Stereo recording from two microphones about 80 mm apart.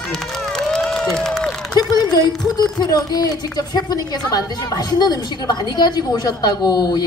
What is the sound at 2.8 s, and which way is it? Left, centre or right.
A woman's voice, left.